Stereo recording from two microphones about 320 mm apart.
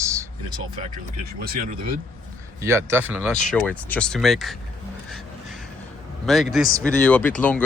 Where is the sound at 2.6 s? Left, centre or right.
Centre.